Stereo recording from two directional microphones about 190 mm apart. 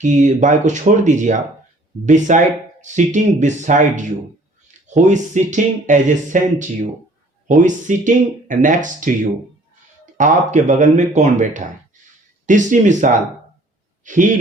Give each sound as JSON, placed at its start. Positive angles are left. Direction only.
{"t": 0.0, "sound": "speech", "side_deg": -40}
{"t": 10.2, "sound": "a man's voice", "side_deg": -40}